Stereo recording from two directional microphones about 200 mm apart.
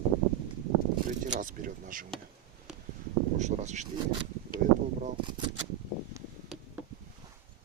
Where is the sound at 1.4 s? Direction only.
40° right (ahead or behind).